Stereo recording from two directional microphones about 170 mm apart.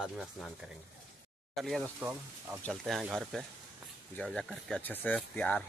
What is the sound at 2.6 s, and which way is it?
Speech, centre (ahead or behind).